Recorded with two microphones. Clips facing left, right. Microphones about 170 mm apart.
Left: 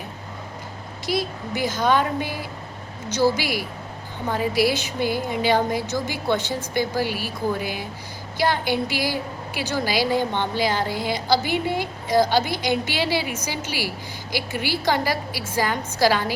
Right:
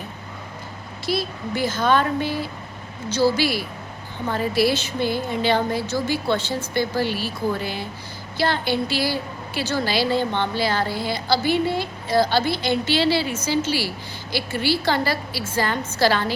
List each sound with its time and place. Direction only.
1.0 s a woman's voice: 15° left (ahead or behind)